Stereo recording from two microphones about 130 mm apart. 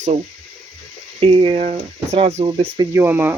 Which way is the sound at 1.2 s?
45° right (ahead or behind).